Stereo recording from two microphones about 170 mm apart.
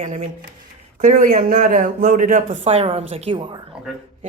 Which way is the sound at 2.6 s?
35° right (ahead or behind).